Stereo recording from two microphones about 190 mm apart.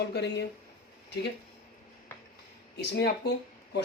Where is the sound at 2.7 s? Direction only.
60° left (ahead or behind).